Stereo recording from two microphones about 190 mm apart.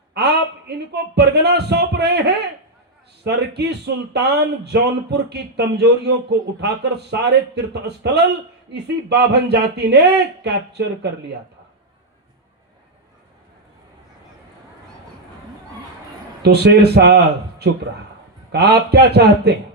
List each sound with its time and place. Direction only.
0.1 s speech: 60° right (ahead or behind)
16.4 s speech: 60° right (ahead or behind)
18.5 s speech: 60° right (ahead or behind)